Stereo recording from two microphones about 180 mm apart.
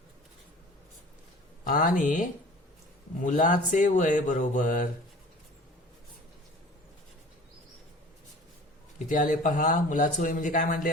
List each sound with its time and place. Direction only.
1.6 s speech: 50° left (ahead or behind)
9.0 s speech: 45° left (ahead or behind)